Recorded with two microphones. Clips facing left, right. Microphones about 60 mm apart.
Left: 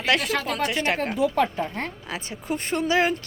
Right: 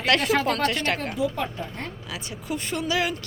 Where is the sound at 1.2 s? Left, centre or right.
Left.